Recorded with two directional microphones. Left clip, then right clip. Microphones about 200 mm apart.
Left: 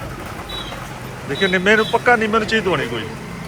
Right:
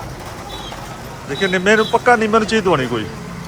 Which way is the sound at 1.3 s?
15° right (ahead or behind).